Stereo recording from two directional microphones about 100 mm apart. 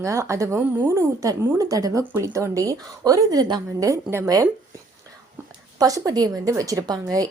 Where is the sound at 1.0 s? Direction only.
30° right (ahead or behind).